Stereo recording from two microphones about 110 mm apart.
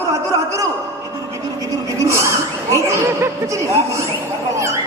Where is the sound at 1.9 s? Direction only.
25° right (ahead or behind).